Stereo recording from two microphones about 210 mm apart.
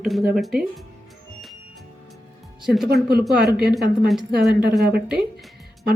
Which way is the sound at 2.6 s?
Centre (ahead or behind).